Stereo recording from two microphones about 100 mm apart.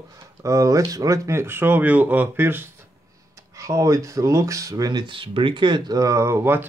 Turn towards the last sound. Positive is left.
turn(degrees=-25)  # may be behind; listen again after turning